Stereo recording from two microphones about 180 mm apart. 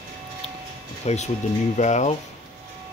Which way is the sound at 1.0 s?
40° left (ahead or behind).